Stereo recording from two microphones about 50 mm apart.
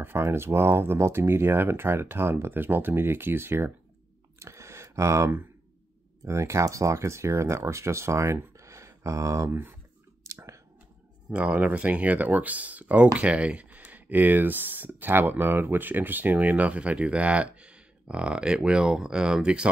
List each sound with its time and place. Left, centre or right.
0.2 s speech: right
0.9 s speech: right
4.4 s a sound: right
6.2 s speech: right
8.5 s a sound: right
9.5 s speech: right
10.2 s clicking: right
11.2 s speech: right